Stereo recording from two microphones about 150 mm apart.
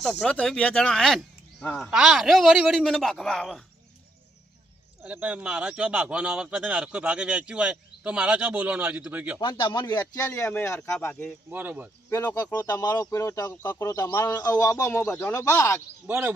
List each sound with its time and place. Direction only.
0.0 s speech: centre (ahead or behind)
5.0 s speech: 10° right (ahead or behind)
9.4 s speech: 30° left (ahead or behind)
10.2 s speech: 15° left (ahead or behind)
11.5 s speech: 10° right (ahead or behind)
12.1 s speech: 20° left (ahead or behind)
16.0 s speech: 15° right (ahead or behind)